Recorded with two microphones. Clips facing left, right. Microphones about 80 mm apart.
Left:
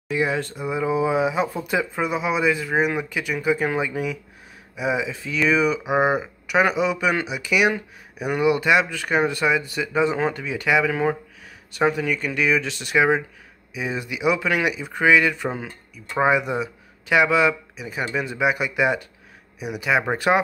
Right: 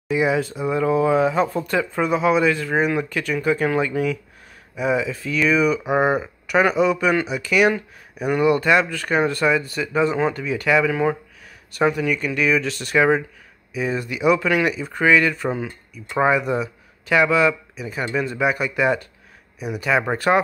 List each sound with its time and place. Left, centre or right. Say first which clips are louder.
0.1 s speech: right 3 dB; centre
0.7 s speech: right 3 dB; centre
5.9 s speech: right 1 dB; centre